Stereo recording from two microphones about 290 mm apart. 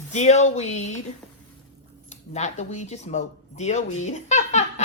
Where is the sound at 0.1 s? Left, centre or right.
Left.